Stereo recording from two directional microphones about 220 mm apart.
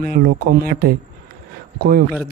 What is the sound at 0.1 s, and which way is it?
Speech, 45° right (ahead or behind).